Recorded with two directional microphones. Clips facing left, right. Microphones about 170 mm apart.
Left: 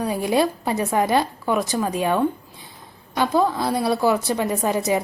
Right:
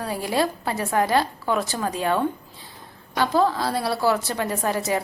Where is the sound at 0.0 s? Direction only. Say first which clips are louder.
Left 4 dB; 20° left (ahead or behind).